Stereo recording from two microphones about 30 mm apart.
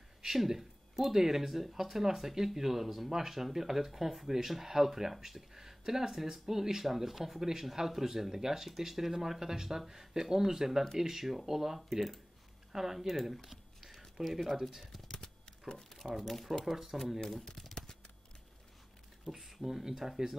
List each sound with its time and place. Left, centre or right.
0.2 s speech: centre
14.2 s speech: centre
15.0 s typing: left
15.7 s speech: left
16.0 s speech: centre
17.3 s speech: centre
19.2 s speech: centre